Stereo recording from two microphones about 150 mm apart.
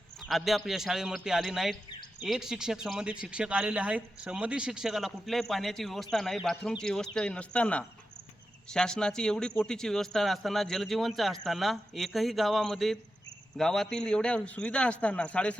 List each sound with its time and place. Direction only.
0.3 s a man's voice: centre (ahead or behind)